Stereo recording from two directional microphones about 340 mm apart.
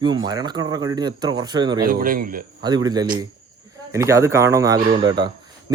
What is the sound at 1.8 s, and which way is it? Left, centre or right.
Speech, right.